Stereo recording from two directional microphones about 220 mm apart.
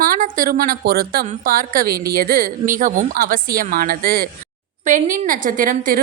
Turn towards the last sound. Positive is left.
turn(degrees=-35)  # may be behind; listen again after turning